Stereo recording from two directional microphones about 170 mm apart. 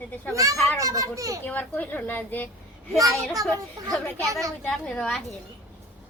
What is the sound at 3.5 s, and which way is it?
A child's voice, 20° right (ahead or behind).